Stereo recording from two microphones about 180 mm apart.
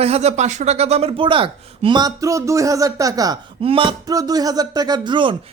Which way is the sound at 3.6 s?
30° right (ahead or behind).